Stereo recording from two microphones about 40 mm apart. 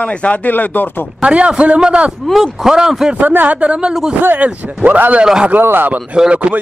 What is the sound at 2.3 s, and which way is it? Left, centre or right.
Speech, centre.